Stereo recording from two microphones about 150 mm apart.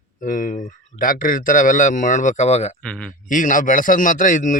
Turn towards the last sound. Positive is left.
turn(degrees=60)  # may be behind; listen again after turning